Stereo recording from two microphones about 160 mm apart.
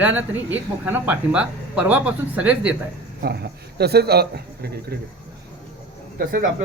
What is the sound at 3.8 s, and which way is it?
A man's voice, 85° right.